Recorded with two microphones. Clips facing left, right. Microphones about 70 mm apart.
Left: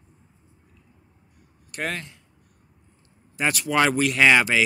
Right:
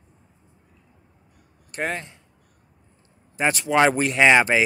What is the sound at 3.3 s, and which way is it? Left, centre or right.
Speech, right.